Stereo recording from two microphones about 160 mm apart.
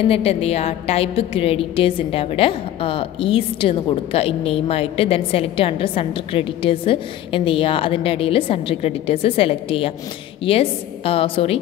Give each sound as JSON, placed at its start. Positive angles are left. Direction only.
{"t": 0.1, "sound": "a woman's voice", "side_deg": 40}